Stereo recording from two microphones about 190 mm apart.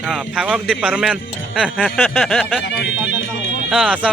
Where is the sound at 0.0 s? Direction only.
Centre (ahead or behind).